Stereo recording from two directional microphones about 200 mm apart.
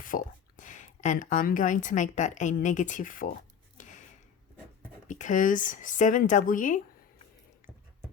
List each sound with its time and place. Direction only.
0.0 s speech: 40° left (ahead or behind)
3.8 s a sound: 40° left (ahead or behind)
5.0 s speech: 40° left (ahead or behind)